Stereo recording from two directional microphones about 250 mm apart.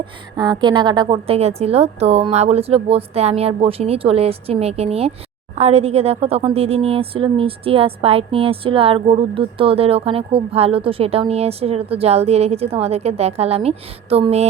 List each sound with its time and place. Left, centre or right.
0.0 s a woman's voice: centre